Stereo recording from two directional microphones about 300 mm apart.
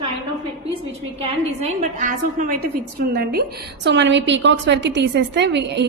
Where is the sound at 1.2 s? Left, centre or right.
Right.